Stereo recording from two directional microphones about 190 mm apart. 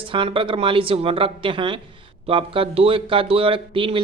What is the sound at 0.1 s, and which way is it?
A man's voice, 25° right (ahead or behind).